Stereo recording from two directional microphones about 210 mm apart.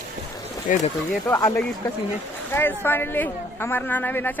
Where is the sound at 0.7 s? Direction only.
35° left (ahead or behind).